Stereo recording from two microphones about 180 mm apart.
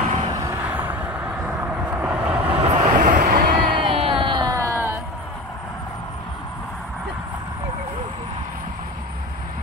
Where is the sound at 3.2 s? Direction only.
55° right (ahead or behind).